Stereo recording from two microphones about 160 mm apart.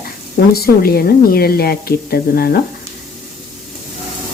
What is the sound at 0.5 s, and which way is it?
A woman's voice, 70° left (ahead or behind).